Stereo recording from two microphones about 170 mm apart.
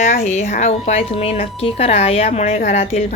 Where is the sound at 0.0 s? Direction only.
45° left (ahead or behind).